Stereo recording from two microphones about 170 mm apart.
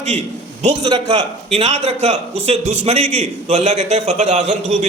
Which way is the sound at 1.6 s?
40° right (ahead or behind).